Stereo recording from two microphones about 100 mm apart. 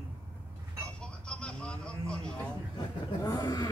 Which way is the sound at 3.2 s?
40° left (ahead or behind).